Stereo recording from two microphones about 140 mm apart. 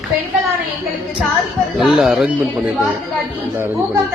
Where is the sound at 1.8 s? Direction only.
Centre (ahead or behind).